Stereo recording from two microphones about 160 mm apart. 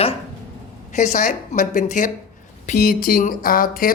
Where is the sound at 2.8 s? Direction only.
65° left (ahead or behind).